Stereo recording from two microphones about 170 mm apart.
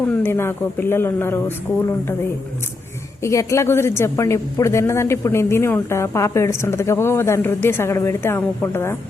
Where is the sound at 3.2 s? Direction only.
20° left (ahead or behind).